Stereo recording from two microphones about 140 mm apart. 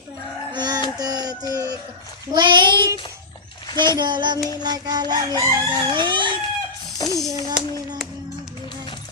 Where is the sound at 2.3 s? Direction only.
30° right (ahead or behind).